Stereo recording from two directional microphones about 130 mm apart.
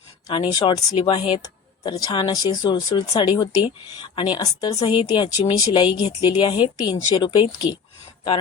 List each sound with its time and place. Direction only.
0.3 s speech: 40° left (ahead or behind)